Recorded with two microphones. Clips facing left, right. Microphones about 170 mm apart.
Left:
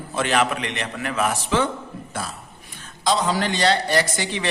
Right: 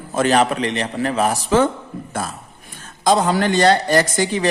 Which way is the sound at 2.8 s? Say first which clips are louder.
Right 5 dB; 50° right (ahead or behind).